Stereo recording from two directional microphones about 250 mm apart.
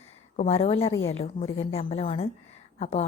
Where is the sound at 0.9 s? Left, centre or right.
Left.